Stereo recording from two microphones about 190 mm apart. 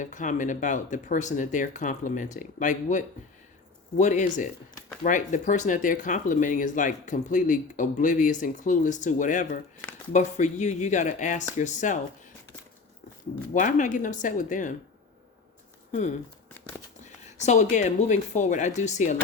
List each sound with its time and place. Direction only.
0.0 s speech: 40° left (ahead or behind)
13.5 s speech: 40° left (ahead or behind)
17.0 s speech: 35° left (ahead or behind)